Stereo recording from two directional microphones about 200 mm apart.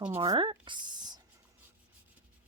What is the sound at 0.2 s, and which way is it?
Speech, 25° right (ahead or behind).